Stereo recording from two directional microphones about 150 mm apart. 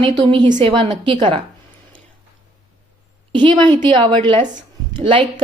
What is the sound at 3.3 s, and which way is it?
A woman's voice, 30° right (ahead or behind).